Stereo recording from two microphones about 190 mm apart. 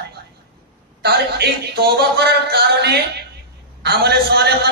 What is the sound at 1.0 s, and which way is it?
A man's voice, 60° right (ahead or behind).